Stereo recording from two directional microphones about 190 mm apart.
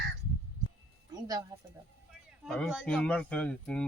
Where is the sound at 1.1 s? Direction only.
20° right (ahead or behind).